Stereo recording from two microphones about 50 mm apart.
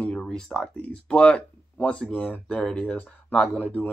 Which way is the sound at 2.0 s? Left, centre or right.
Centre.